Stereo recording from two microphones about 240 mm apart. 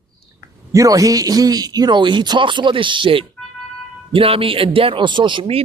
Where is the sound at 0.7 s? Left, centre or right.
Centre.